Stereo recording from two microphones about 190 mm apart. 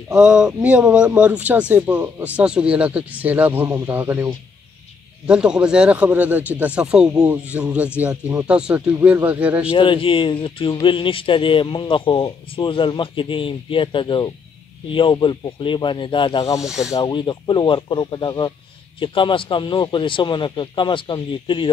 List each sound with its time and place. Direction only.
0.1 s speech: 5° right (ahead or behind)
9.7 s speech: 30° left (ahead or behind)
16.6 s speech: centre (ahead or behind)
16.9 s speech: 25° left (ahead or behind)